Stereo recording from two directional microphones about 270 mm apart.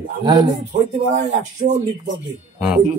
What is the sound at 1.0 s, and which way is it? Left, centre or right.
Speech, right.